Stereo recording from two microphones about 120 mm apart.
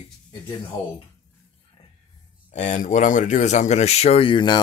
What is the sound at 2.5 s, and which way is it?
Speech, 80° left.